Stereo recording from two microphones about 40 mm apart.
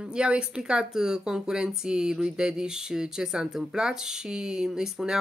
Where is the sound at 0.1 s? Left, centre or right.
Right.